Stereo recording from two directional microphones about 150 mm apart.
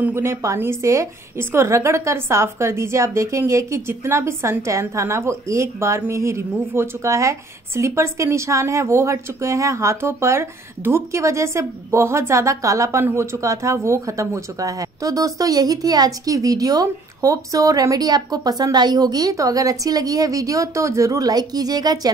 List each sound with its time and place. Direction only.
0.0 s a woman's voice: 15° right (ahead or behind)